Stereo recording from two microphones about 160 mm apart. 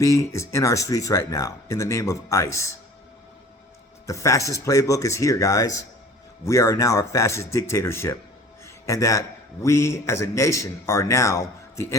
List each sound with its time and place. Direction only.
0.0 s speech: 20° left (ahead or behind)
4.0 s speech: 20° left (ahead or behind)
8.6 s a sound: 20° left (ahead or behind)
9.6 s speech: 15° left (ahead or behind)